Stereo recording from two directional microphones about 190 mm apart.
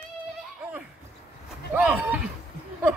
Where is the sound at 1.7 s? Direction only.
5° right (ahead or behind).